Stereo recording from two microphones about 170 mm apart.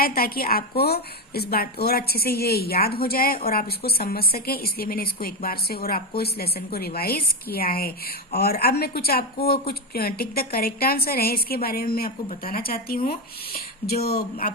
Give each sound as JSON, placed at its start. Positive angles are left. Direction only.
{"t": 0.0, "sound": "a woman's voice", "side_deg": 60}